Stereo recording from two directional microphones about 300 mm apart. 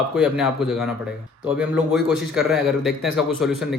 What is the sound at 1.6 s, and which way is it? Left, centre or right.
Speech, centre.